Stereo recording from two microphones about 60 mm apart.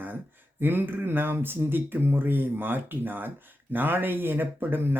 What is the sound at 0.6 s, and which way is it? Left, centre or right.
Speech, right.